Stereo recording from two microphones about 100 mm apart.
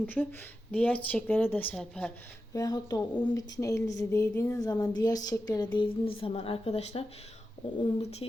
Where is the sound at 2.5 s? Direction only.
40° left (ahead or behind).